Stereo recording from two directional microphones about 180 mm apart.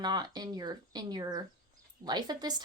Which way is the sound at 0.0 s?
20° right (ahead or behind).